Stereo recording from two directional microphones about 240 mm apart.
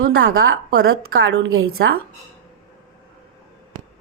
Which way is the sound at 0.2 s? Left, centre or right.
Right.